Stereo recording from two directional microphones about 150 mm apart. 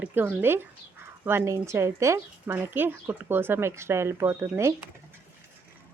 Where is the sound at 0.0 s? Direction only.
15° right (ahead or behind).